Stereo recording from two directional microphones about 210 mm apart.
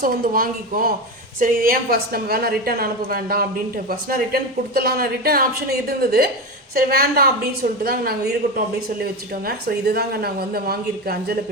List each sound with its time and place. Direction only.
0.0 s a woman's voice: 45° right (ahead or behind)
9.5 s a woman's voice: 45° right (ahead or behind)